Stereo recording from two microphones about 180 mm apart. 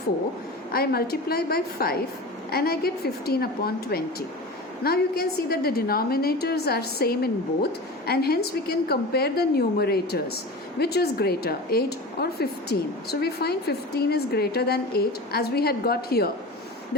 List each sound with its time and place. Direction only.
0.7 s a woman's voice: 60° left (ahead or behind)